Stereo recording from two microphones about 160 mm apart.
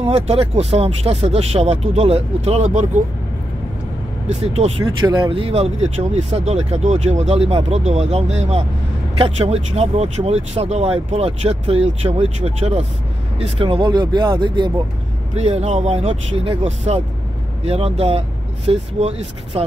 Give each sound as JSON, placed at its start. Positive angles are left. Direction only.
{"t": 0.0, "sound": "speech", "side_deg": -40}
{"t": 4.3, "sound": "speech", "side_deg": -45}
{"t": 5.0, "sound": "speech", "side_deg": -30}
{"t": 15.3, "sound": "speech", "side_deg": -40}